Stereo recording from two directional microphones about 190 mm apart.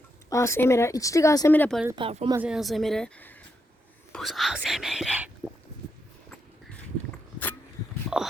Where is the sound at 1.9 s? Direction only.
30° right (ahead or behind).